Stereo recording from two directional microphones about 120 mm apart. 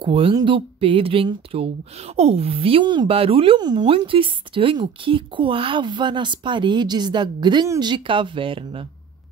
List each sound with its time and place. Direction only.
0.0 s speech: 50° right (ahead or behind)
0.3 s speech: 35° right (ahead or behind)
0.6 s speech: 50° right (ahead or behind)
3.1 s speech: 55° right (ahead or behind)
3.6 s speech: 40° right (ahead or behind)